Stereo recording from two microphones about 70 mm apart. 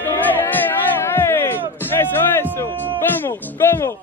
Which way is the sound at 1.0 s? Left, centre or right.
Left.